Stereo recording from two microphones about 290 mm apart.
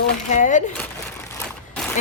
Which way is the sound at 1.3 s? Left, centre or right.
Centre.